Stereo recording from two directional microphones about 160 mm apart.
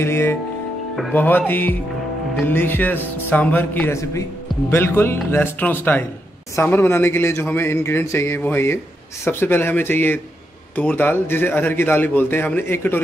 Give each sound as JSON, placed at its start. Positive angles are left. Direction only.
{"t": 0.0, "sound": "speech", "side_deg": 15}